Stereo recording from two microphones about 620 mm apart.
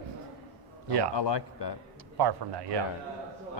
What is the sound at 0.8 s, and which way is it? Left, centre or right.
Speech, right.